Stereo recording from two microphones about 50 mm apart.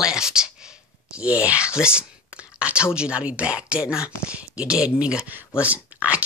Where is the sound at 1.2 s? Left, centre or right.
Right.